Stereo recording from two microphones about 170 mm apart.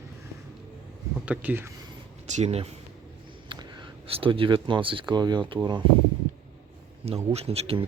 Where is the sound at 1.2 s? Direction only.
10° right (ahead or behind).